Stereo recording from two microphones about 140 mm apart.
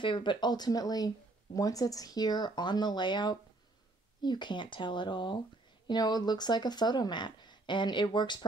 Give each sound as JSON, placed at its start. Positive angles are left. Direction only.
{"t": 0.0, "sound": "speech", "side_deg": 35}